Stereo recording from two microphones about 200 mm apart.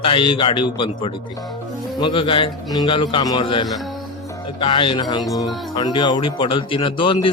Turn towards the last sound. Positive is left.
turn(degrees=25)  # may be behind; listen again after turning